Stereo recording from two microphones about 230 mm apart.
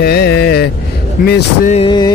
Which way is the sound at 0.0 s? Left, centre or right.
Left.